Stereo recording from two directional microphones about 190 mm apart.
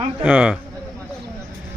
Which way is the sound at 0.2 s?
10° right (ahead or behind).